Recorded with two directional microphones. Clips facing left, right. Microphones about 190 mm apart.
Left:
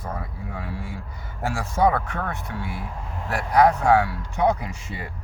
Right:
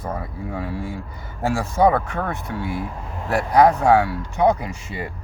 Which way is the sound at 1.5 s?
25° right (ahead or behind).